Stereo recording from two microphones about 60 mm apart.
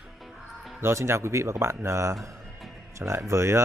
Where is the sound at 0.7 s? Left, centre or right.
Right.